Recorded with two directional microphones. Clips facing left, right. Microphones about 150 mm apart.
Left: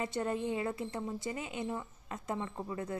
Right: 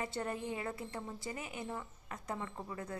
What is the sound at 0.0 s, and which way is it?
Speech, 25° left (ahead or behind).